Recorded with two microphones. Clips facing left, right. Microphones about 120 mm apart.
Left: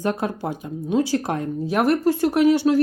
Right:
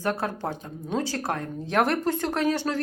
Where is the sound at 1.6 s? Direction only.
5° left (ahead or behind).